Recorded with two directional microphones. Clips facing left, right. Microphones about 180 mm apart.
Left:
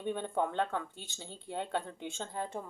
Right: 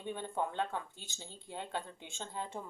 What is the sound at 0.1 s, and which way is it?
A woman's voice, 60° left (ahead or behind).